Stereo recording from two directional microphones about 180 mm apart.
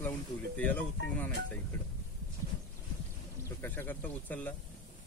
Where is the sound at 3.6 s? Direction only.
10° left (ahead or behind).